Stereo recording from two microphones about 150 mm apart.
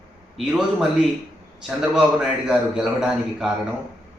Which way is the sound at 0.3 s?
5° right (ahead or behind).